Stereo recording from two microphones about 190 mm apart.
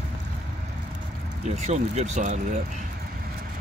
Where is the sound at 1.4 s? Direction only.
40° right (ahead or behind).